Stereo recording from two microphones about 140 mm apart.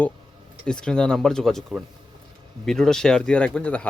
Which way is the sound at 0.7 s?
5° left (ahead or behind).